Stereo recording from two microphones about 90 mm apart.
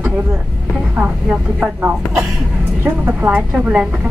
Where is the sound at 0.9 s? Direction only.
10° right (ahead or behind).